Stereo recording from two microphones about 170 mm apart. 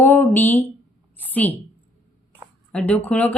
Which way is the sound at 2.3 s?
10° left (ahead or behind).